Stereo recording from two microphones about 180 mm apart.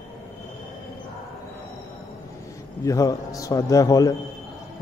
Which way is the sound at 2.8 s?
20° left (ahead or behind).